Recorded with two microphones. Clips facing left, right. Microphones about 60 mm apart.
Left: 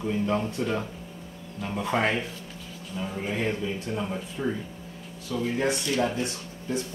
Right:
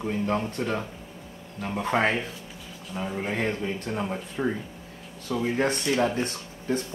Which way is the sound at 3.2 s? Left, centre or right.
Right.